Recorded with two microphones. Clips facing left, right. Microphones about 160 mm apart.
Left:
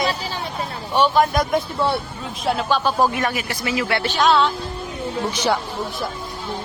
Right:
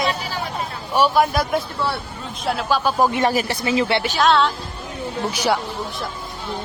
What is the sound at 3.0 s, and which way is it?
Speech, 25° right (ahead or behind).